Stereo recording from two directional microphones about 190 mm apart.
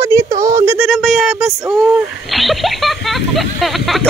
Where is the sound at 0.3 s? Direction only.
40° right (ahead or behind).